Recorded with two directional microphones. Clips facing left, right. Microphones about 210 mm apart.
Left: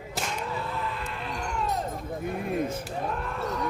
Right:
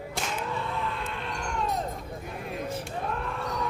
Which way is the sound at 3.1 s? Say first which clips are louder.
Left 2 dB; centre (ahead or behind).